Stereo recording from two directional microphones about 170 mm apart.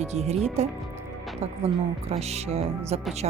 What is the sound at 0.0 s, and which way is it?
Speech, 40° right (ahead or behind).